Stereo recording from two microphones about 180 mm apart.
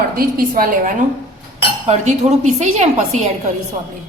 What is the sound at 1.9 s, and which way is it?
A woman's voice, 40° right (ahead or behind).